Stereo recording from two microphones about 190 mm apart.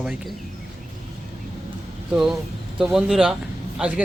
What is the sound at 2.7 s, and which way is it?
Speech, 5° right (ahead or behind).